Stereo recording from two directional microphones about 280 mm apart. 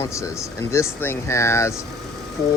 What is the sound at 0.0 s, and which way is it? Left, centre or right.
Speech, centre.